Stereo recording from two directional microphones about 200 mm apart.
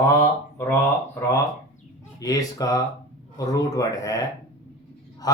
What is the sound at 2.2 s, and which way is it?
Speech, 15° left (ahead or behind).